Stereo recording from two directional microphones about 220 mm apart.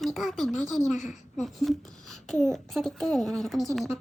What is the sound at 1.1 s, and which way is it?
A child's voice, centre (ahead or behind).